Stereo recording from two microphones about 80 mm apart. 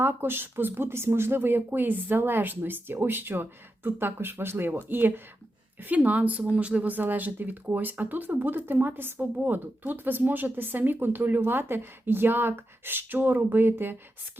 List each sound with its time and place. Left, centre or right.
0.0 s speech: right